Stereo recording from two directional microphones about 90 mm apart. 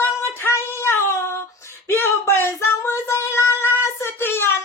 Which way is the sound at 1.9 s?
25° left (ahead or behind).